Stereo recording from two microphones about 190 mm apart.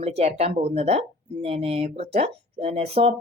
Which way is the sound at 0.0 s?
35° right (ahead or behind).